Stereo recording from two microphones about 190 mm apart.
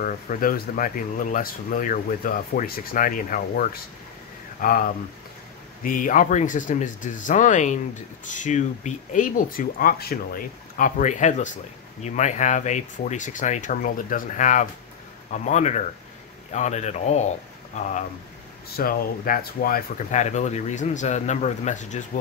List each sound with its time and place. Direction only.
0.0 s speech: 45° left (ahead or behind)
5.9 s speech: 45° left (ahead or behind)